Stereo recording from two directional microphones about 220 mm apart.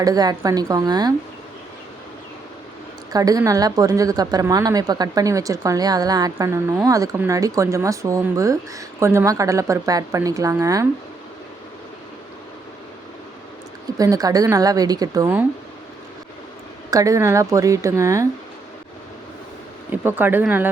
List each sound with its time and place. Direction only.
0.0 s speech: 15° right (ahead or behind)
3.1 s speech: 15° right (ahead or behind)
14.0 s speech: 15° right (ahead or behind)
16.9 s speech: 15° right (ahead or behind)
19.9 s speech: 10° right (ahead or behind)